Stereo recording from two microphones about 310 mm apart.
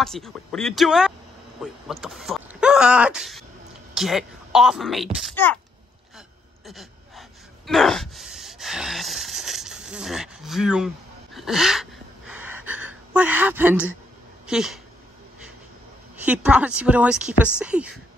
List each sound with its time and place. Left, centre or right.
0.0 s speech: centre
6.1 s gasp: centre
14.5 s speech: centre
16.3 s speech: centre